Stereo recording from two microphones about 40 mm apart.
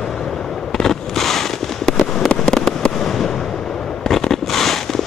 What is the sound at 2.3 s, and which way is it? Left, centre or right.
Fireworks, centre.